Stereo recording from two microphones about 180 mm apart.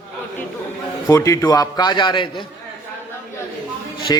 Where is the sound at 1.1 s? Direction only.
20° left (ahead or behind).